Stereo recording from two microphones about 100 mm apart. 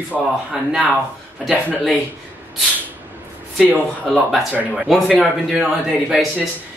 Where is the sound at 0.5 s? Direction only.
5° right (ahead or behind).